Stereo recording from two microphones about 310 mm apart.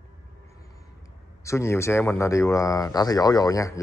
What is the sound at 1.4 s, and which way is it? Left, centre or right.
Speech, centre.